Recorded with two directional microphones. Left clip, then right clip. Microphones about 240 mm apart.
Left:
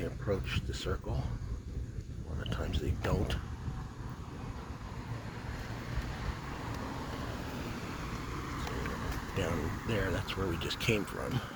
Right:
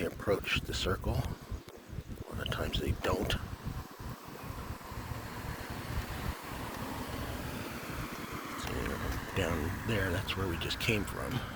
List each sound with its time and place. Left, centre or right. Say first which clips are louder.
0.0 s speech: right 4 dB; right
2.4 s speech: right 4 dB; centre
5.9 s vehicle: right 1 dB; right
9.3 s speech: right 1 dB; centre